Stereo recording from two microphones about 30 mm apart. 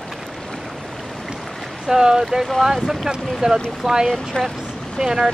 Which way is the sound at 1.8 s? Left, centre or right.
Centre.